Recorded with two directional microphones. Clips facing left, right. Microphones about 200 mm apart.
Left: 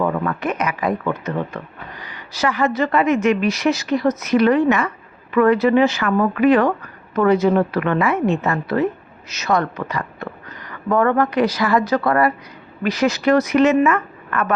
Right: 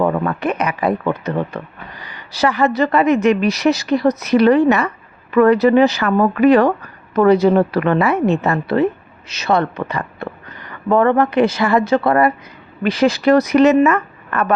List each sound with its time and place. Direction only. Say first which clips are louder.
0.0 s a woman's voice: right 3 dB; 35° right (ahead or behind)